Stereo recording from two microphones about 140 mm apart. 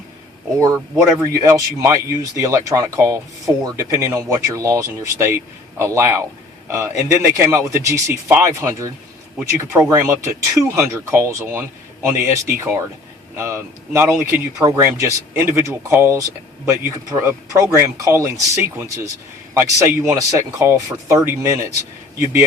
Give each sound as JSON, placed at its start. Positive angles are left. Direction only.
{"t": 0.6, "sound": "speech", "side_deg": -20}
{"t": 10.1, "sound": "speech", "side_deg": -25}